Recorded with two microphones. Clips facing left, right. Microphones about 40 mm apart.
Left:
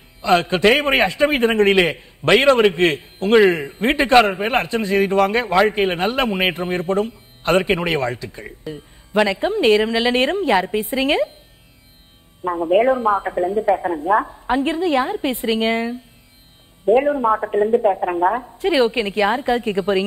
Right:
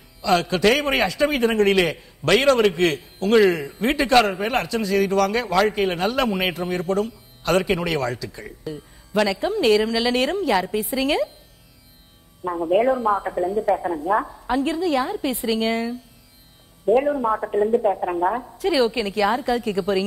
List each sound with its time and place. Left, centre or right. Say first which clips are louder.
0.2 s a man's voice: left 3 dB; left
12.4 s a man's voice: left 3 dB; left